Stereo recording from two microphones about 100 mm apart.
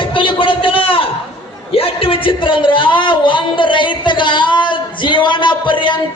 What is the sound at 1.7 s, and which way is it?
A man's voice, 70° left (ahead or behind).